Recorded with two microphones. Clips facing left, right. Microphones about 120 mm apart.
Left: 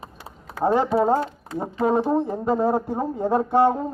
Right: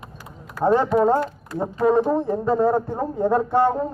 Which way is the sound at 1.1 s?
20° left (ahead or behind).